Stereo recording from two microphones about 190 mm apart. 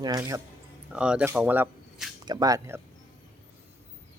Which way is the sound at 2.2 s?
20° right (ahead or behind).